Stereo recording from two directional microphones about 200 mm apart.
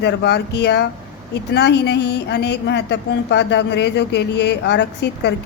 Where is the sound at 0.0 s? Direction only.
55° left (ahead or behind).